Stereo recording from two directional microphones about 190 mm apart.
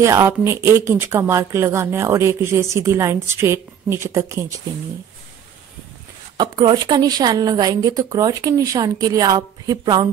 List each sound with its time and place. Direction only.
0.0 s speech: 15° right (ahead or behind)
6.3 s a woman's voice: 20° right (ahead or behind)